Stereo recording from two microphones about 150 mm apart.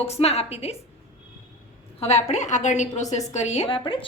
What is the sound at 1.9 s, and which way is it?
A woman's voice, 45° left (ahead or behind).